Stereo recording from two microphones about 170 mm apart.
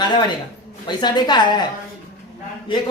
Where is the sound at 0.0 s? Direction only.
25° left (ahead or behind).